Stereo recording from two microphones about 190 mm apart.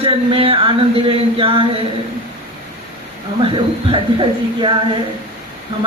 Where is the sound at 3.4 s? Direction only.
25° right (ahead or behind).